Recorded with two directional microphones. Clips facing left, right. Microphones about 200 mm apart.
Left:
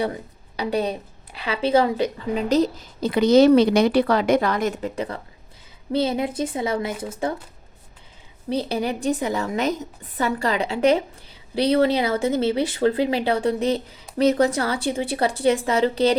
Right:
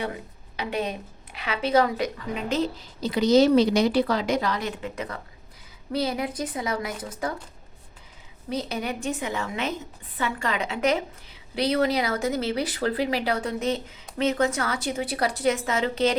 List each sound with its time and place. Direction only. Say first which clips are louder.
0.5 s a woman's voice: left 5 dB; 35° left (ahead or behind)
3.0 s speech: left 4 dB; 55° left (ahead or behind)
4.9 s a woman's voice: left 5 dB; 30° left (ahead or behind)
8.4 s a woman's voice: left 5 dB; 30° left (ahead or behind)